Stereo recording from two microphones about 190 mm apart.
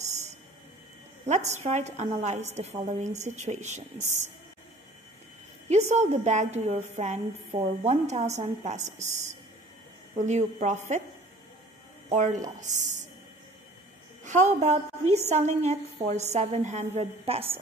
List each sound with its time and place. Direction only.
1.2 s a woman's voice: 40° right (ahead or behind)
5.7 s a woman's voice: 35° right (ahead or behind)
12.1 s a woman's voice: 40° right (ahead or behind)
14.2 s a woman's voice: 40° right (ahead or behind)